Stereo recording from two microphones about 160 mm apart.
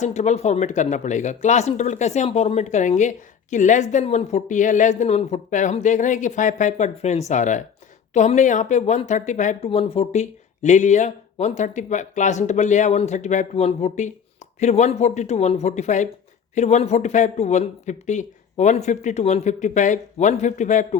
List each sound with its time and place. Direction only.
0.0 s speech: 45° left (ahead or behind)
9.6 s speech: 40° left (ahead or behind)